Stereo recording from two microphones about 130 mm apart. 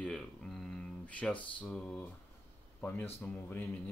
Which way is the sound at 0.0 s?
5° left (ahead or behind).